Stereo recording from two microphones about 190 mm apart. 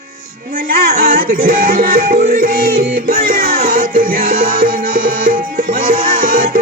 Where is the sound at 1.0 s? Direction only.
45° right (ahead or behind).